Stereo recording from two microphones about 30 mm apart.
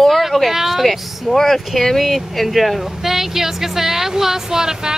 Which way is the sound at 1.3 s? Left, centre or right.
Centre.